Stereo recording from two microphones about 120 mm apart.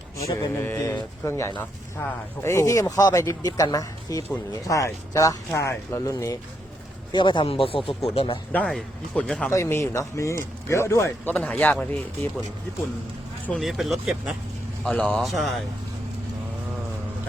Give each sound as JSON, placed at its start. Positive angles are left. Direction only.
{"t": 0.2, "sound": "speech", "side_deg": 25}
{"t": 7.1, "sound": "speech", "side_deg": 40}
{"t": 8.7, "sound": "speech", "side_deg": 5}
{"t": 9.5, "sound": "speech", "side_deg": 25}
{"t": 11.3, "sound": "speech", "side_deg": 10}
{"t": 13.6, "sound": "speech", "side_deg": 0}
{"t": 14.8, "sound": "speech", "side_deg": 15}
{"t": 15.2, "sound": "speech", "side_deg": 0}